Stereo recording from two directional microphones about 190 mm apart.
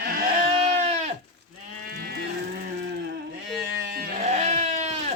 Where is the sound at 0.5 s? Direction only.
35° right (ahead or behind).